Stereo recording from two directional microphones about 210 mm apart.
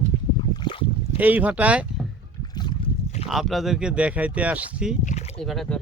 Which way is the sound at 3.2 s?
Centre (ahead or behind).